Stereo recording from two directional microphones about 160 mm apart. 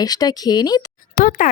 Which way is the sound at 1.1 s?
55° left (ahead or behind).